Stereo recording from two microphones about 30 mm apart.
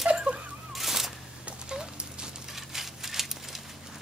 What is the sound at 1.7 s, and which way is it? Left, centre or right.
Horse, right.